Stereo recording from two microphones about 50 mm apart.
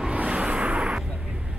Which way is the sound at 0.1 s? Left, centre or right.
Right.